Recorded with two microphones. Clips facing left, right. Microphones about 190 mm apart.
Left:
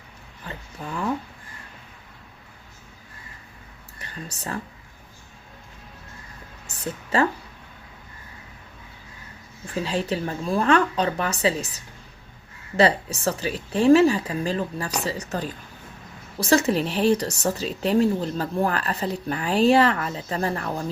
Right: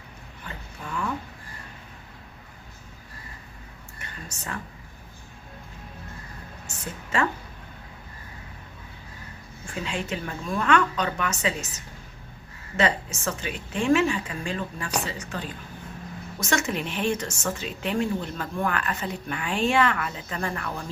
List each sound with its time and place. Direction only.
0.4 s a sound: 35° left (ahead or behind)
3.9 s speech: 35° left (ahead or behind)
9.7 s speech: 35° left (ahead or behind)